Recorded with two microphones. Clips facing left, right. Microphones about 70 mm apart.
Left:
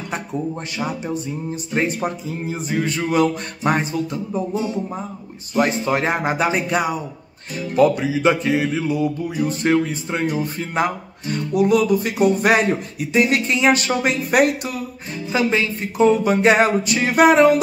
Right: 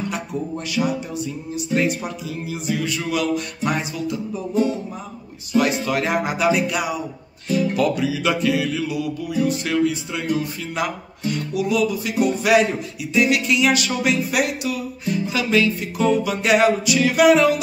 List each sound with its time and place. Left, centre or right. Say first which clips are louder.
0.7 s music: right 4 dB; left
5.5 s music: left 1 dB; left